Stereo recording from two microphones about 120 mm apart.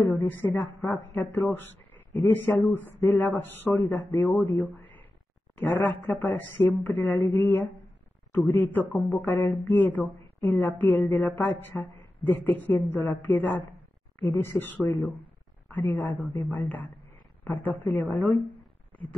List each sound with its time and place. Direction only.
0.1 s a man's voice: 15° left (ahead or behind)